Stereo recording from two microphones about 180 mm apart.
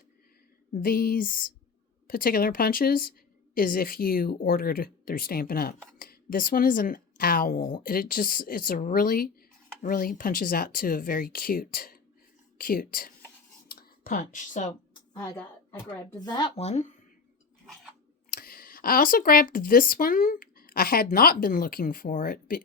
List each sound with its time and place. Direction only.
0.7 s a woman's voice: 50° left (ahead or behind)
13.7 s a sound: 55° left (ahead or behind)
14.7 s a sound: 15° left (ahead or behind)
16.2 s speech: 25° left (ahead or behind)
16.6 s speech: 40° left (ahead or behind)
18.3 s speech: 55° left (ahead or behind)